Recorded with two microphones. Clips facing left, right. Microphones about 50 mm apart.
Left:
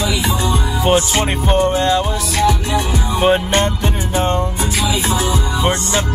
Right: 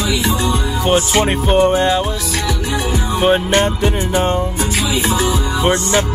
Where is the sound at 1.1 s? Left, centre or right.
Centre.